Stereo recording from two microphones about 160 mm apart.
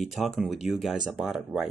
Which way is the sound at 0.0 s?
Centre (ahead or behind).